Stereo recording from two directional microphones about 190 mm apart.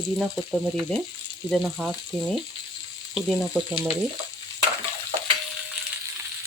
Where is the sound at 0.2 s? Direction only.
Centre (ahead or behind).